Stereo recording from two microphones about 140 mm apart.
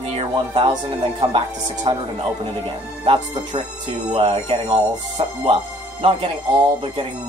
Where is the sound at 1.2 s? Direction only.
30° right (ahead or behind).